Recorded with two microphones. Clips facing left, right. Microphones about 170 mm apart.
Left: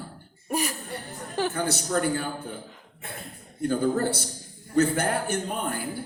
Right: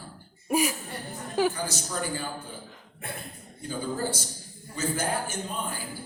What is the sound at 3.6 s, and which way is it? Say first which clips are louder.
A man's voice: left 7 dB; 60° left (ahead or behind).